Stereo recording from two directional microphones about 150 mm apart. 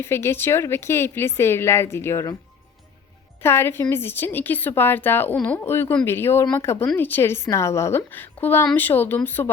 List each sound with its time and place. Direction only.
0.0 s a woman's voice: 15° left (ahead or behind)
3.4 s a woman's voice: 15° left (ahead or behind)